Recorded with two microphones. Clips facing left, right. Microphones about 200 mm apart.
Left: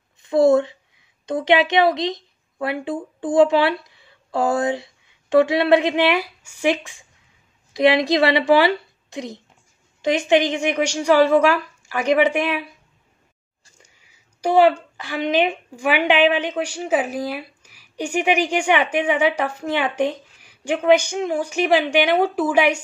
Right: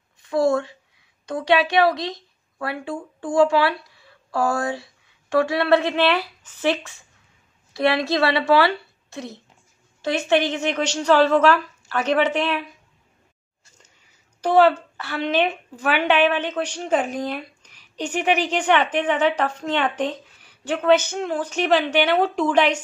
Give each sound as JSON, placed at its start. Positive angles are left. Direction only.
{"t": 0.2, "sound": "a sound", "side_deg": 20}
{"t": 1.2, "sound": "a woman's voice", "side_deg": 20}
{"t": 14.4, "sound": "a woman's voice", "side_deg": 15}